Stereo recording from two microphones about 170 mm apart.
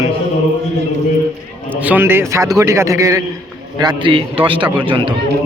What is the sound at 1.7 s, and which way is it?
A man's voice, 10° right (ahead or behind).